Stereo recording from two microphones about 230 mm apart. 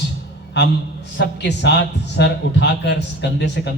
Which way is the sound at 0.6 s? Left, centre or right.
Left.